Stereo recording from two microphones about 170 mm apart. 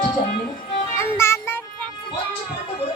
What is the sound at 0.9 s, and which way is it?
Music, 15° left (ahead or behind).